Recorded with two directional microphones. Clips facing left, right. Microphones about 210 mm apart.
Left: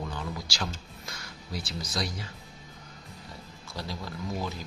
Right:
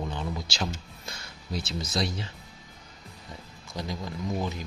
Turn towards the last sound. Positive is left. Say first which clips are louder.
# right 3 dB
turn(degrees=-20)  # may be behind; listen again after turning